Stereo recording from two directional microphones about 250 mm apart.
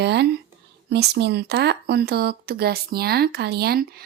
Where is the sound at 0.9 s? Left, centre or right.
Right.